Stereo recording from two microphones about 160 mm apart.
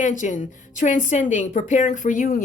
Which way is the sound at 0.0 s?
50° left (ahead or behind).